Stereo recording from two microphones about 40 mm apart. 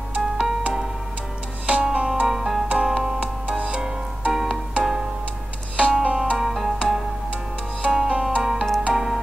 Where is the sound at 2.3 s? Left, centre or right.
Centre.